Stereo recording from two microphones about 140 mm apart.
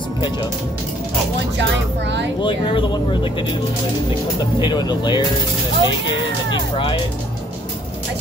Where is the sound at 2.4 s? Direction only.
35° left (ahead or behind).